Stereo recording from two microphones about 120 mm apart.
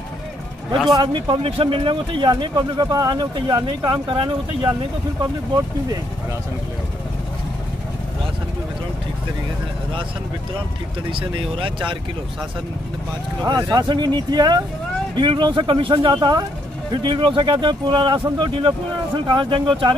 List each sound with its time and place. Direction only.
0.9 s speech: 40° right (ahead or behind)
11.1 s speech: 45° right (ahead or behind)
13.4 s speech: 35° right (ahead or behind)